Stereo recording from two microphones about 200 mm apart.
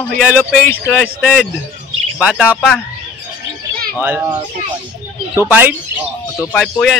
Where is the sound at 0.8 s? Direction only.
10° left (ahead or behind).